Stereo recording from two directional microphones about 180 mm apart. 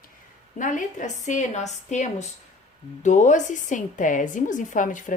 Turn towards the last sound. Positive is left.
turn(degrees=45)  # may be behind; listen again after turning